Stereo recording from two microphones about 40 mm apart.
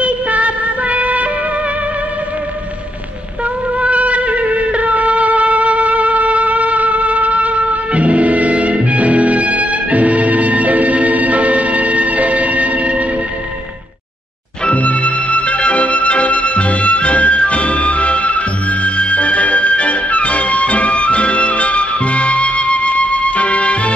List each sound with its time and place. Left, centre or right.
0.0 s music: right
3.8 s music: right
14.7 s music: left